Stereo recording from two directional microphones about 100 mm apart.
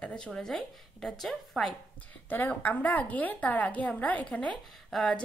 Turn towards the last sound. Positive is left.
turn(degrees=5)  # may be behind; listen again after turning